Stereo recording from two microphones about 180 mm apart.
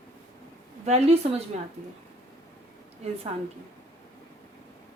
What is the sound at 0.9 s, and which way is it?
Speech, 35° right (ahead or behind).